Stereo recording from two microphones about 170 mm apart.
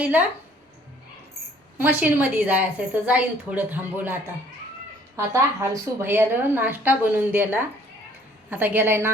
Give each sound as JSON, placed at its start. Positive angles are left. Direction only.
{"t": 0.0, "sound": "a woman's voice", "side_deg": -10}
{"t": 1.8, "sound": "a woman's voice", "side_deg": -10}